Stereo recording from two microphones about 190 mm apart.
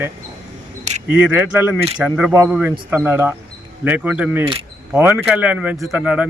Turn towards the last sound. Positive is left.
turn(degrees=-5)  # may be behind; listen again after turning